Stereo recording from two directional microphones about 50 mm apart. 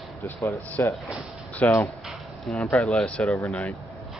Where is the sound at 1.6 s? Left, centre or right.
Left.